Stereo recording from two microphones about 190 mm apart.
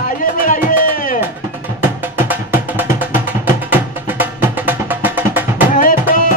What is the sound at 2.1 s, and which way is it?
Music, 10° right (ahead or behind).